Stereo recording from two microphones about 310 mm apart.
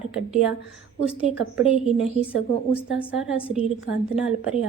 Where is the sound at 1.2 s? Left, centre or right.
Centre.